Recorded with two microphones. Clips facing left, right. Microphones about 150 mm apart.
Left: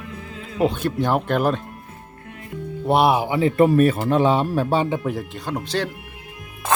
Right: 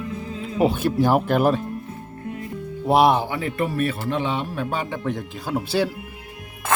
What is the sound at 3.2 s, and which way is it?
Speech, 20° left (ahead or behind).